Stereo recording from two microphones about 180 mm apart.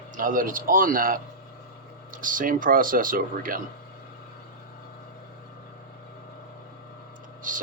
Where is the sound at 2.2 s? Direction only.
50° right (ahead or behind).